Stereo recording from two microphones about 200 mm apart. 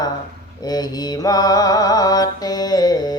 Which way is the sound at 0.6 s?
20° left (ahead or behind).